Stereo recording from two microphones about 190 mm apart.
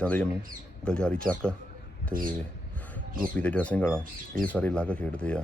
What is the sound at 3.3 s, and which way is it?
Speech, 5° left (ahead or behind).